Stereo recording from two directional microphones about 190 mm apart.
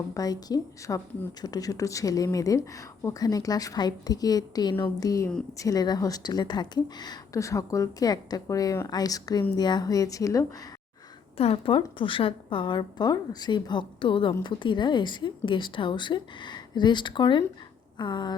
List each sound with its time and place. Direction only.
0.1 s speech: 20° left (ahead or behind)
11.3 s speech: 30° left (ahead or behind)